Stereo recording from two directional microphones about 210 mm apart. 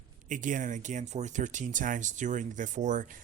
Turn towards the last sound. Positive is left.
turn(degrees=-35)  # may be behind; listen again after turning